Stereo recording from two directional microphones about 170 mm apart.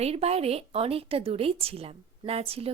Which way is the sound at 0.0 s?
35° right (ahead or behind).